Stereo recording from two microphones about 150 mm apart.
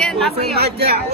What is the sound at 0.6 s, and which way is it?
Speech, 90° right.